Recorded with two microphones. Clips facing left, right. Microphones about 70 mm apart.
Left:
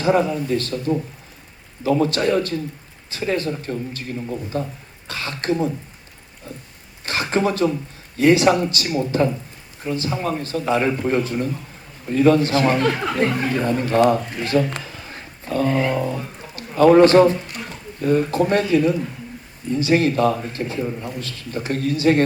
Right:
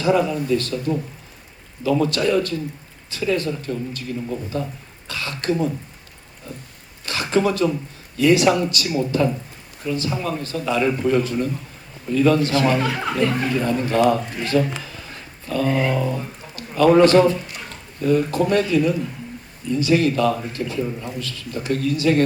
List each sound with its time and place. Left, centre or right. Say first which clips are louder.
0.0 s a man's voice: left 1 dB; left
7.0 s a man's voice: right 1 dB; left
12.8 s speech: left 3 dB; centre
13.4 s a man's voice: even; left
14.8 s a sound: left 1 dB; left
15.9 s a man's voice: even; left
16.6 s a sound: even; left
17.0 s a man's voice: left 2 dB; left